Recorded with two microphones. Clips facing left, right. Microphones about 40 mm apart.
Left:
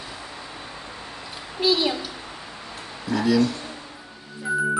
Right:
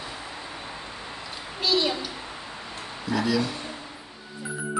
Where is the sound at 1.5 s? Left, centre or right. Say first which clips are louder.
Left 3 dB; centre.